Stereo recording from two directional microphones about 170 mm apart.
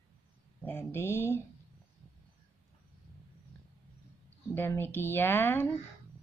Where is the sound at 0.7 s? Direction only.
15° left (ahead or behind).